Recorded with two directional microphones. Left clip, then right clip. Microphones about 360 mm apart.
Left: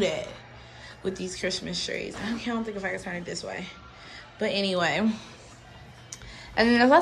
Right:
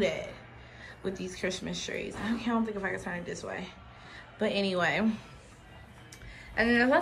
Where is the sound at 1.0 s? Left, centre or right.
Centre.